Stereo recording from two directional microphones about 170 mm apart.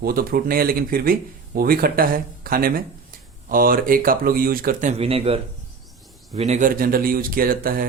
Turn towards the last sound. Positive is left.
turn(degrees=-60)  # may be behind; listen again after turning